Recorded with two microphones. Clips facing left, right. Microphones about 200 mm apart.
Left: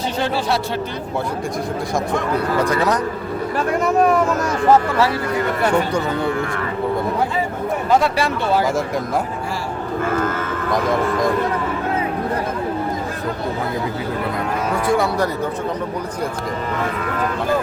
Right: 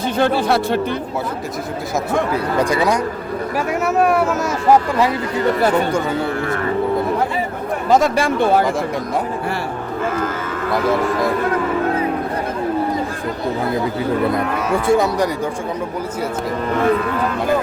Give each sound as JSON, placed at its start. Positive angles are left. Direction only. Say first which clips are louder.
{"t": 0.2, "sound": "speech", "louder": "right 5 dB", "side_deg": -55}
{"t": 2.3, "sound": "speech", "louder": "right 1 dB", "side_deg": -10}
{"t": 7.9, "sound": "speech", "louder": "right 4 dB", "side_deg": -45}
{"t": 14.8, "sound": "speech", "louder": "right 3 dB", "side_deg": -20}